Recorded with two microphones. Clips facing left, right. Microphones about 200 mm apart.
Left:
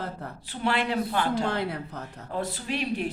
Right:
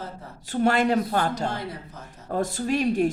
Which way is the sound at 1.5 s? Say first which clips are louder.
Left 3 dB; 65° left (ahead or behind).